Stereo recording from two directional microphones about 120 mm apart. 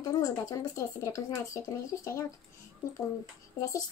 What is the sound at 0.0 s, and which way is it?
Speech, 30° left (ahead or behind).